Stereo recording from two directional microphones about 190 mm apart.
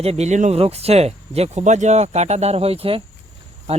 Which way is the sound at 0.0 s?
35° right (ahead or behind).